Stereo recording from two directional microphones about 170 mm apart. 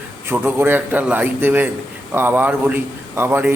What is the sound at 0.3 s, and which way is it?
A man's voice, 10° right (ahead or behind).